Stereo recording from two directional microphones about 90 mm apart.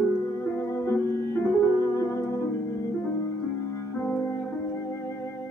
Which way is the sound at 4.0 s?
25° left (ahead or behind).